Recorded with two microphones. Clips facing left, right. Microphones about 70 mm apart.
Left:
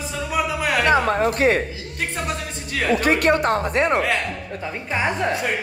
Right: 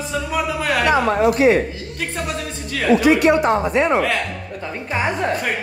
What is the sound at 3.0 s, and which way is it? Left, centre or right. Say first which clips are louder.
Speech: right 4 dB; left.